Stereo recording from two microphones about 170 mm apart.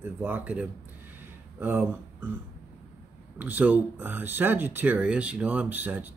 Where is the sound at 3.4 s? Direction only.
10° right (ahead or behind).